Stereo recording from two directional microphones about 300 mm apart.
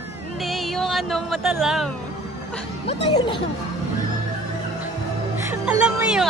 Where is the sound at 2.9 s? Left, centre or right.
Centre.